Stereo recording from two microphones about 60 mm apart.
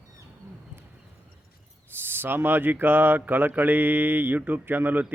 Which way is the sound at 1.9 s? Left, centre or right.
Right.